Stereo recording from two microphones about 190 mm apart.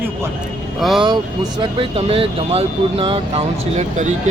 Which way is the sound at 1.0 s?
25° right (ahead or behind).